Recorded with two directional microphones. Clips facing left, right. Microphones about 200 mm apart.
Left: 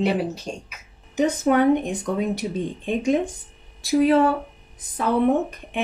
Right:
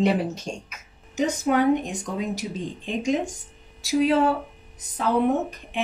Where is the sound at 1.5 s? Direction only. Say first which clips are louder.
Even; 55° left (ahead or behind).